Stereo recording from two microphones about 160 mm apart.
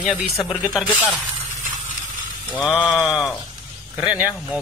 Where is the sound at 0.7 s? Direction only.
5° right (ahead or behind).